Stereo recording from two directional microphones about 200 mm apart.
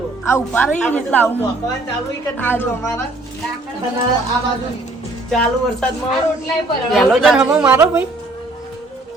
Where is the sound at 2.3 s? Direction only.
10° left (ahead or behind).